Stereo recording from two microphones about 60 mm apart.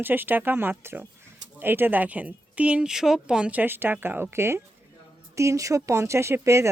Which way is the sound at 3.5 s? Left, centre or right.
Right.